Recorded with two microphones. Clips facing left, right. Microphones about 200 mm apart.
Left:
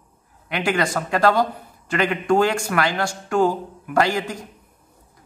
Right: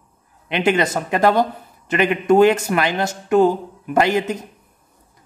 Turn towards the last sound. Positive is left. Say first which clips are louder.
# right 3 dB
turn(degrees=-20)  # may be behind; listen again after turning